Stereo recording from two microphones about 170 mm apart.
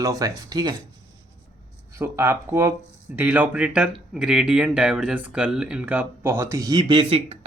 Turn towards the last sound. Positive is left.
turn(degrees=-30)  # may be behind; listen again after turning